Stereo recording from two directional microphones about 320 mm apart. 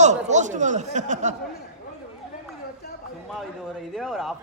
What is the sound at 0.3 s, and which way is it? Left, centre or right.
A man's voice, right.